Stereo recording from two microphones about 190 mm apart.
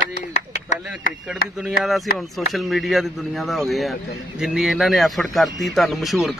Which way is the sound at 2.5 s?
Centre (ahead or behind).